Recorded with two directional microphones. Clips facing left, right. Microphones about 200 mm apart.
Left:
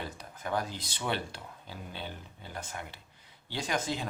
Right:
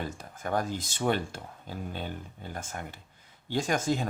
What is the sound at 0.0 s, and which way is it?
Speech, 45° right (ahead or behind).